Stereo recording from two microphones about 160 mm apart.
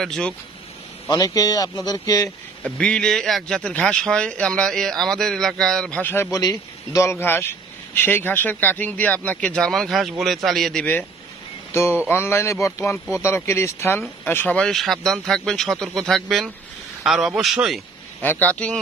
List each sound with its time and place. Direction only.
0.0 s a man's voice: 5° left (ahead or behind)
1.0 s a man's voice: 25° left (ahead or behind)
2.6 s a man's voice: 5° left (ahead or behind)
6.3 s a man's voice: 20° left (ahead or behind)
12.1 s a man's voice: 15° left (ahead or behind); by 17.8 s centre (ahead or behind)
18.2 s speech: 10° left (ahead or behind)